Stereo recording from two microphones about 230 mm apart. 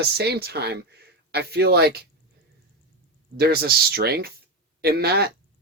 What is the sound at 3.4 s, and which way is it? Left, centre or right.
Speech, right.